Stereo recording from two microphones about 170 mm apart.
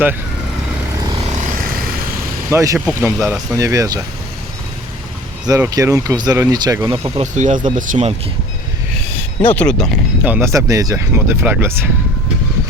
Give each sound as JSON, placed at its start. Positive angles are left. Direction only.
{"t": 2.5, "sound": "speech", "side_deg": -15}
{"t": 5.5, "sound": "speech", "side_deg": -15}
{"t": 7.2, "sound": "speech", "side_deg": -45}
{"t": 9.5, "sound": "speech", "side_deg": 10}
{"t": 10.2, "sound": "speech", "side_deg": -15}